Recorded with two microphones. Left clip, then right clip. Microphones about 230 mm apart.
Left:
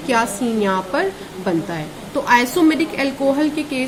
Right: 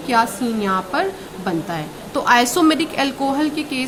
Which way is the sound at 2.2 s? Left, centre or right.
Right.